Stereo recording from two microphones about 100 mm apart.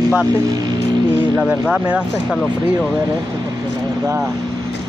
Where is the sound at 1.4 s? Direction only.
10° right (ahead or behind).